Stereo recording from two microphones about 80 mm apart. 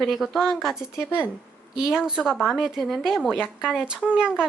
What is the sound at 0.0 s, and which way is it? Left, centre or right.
A woman's voice, centre.